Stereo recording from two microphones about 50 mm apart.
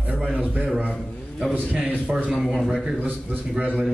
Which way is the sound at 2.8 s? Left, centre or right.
Centre.